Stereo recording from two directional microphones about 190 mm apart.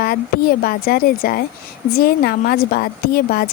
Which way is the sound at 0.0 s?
50° left (ahead or behind).